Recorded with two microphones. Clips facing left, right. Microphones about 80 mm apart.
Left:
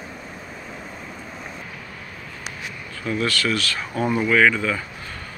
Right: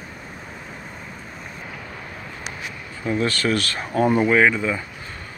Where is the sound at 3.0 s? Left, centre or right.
Right.